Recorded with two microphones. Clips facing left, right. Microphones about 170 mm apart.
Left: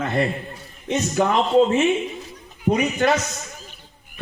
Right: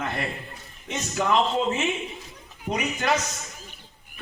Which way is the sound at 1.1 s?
55° left (ahead or behind).